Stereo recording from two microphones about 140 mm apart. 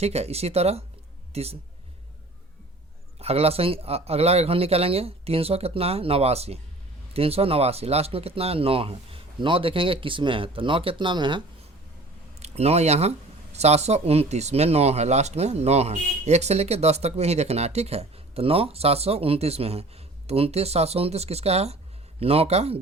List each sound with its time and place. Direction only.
0.0 s a man's voice: 50° right (ahead or behind)
3.2 s speech: 45° right (ahead or behind)
12.4 s speech: 50° right (ahead or behind)